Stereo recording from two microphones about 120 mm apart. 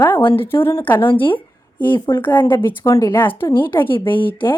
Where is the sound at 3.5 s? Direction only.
40° left (ahead or behind).